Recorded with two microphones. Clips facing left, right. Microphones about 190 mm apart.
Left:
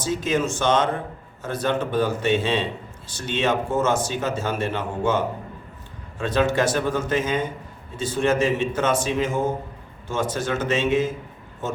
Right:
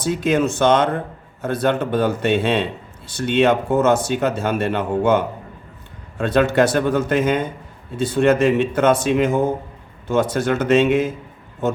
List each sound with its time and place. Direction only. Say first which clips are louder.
0.0 s speech: right 5 dB; 60° right (ahead or behind)